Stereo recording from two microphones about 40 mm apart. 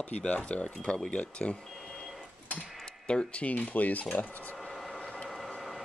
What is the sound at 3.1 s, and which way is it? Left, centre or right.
Speech, left.